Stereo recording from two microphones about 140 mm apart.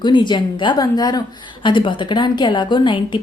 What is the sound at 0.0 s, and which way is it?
A woman's voice, 35° left (ahead or behind).